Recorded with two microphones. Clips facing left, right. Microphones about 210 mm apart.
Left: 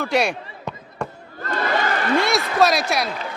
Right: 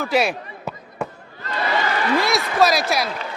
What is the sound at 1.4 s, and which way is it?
Crowd, 50° left (ahead or behind).